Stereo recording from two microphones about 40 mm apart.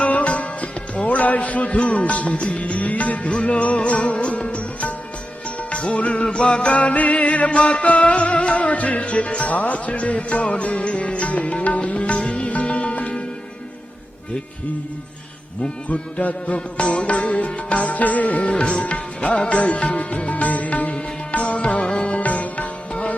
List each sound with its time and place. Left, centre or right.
0.0 s music: left
6.2 s music: left
15.9 s music: left